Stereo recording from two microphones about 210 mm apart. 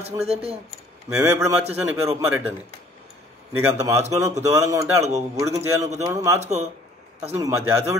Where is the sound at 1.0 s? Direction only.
15° right (ahead or behind).